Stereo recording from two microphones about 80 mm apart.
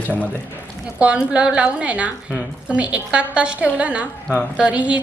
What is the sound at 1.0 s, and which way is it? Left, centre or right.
A woman's voice, centre.